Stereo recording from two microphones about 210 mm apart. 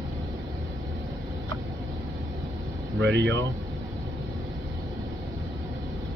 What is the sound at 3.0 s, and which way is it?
Speech, 55° right (ahead or behind).